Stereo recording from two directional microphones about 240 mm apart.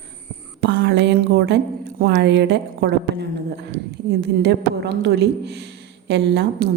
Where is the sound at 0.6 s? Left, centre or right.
Right.